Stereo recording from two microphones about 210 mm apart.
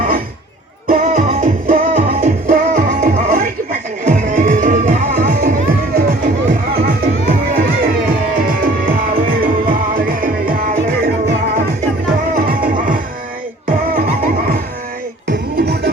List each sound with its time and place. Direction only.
0.9 s music: 40° right (ahead or behind)